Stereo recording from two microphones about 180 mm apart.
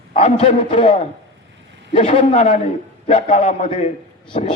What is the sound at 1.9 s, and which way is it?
A man's voice, 35° left (ahead or behind).